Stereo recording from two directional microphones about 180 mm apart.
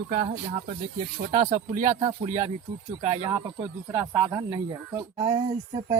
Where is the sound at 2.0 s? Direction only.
35° right (ahead or behind).